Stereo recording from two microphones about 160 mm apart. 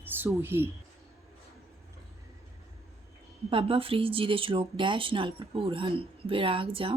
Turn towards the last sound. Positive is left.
turn(degrees=-35)  # may be behind; listen again after turning